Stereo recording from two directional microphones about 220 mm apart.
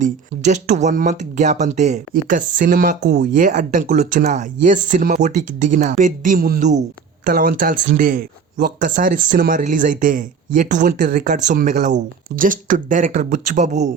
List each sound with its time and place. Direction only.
0.0 s speech: 30° right (ahead or behind)